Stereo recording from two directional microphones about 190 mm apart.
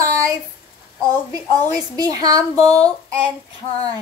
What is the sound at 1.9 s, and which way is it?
Child singing, 20° right (ahead or behind).